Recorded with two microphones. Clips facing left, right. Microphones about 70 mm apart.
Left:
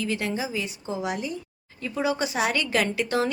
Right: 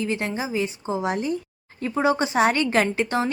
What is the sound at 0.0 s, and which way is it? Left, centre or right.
Speech, right.